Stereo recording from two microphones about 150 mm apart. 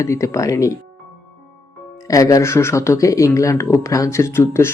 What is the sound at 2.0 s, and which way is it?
Speech, 20° left (ahead or behind).